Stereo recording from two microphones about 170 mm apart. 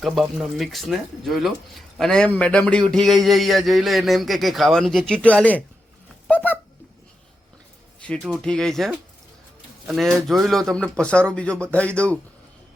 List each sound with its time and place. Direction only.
0.0 s speech: centre (ahead or behind)
6.2 s a sound: 10° left (ahead or behind)
8.2 s speech: centre (ahead or behind)